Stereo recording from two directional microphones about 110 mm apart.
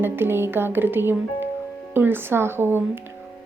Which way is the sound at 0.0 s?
20° right (ahead or behind).